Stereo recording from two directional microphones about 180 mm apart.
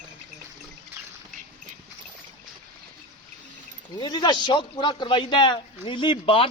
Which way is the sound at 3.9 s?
25° left (ahead or behind).